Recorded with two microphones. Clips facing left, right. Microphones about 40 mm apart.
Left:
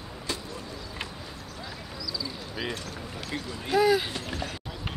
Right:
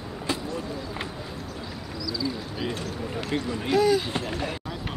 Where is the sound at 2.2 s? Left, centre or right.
Centre.